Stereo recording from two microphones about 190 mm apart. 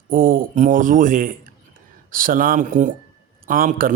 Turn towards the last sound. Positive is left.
turn(degrees=-45)  # may be behind; listen again after turning